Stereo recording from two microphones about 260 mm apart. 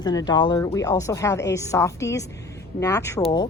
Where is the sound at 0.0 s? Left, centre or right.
Centre.